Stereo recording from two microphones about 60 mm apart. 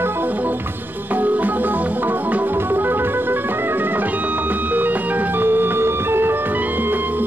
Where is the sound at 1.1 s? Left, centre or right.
Right.